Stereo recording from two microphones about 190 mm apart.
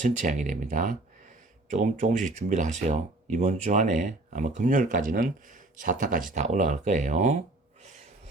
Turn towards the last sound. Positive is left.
turn(degrees=-35)  # may be behind; listen again after turning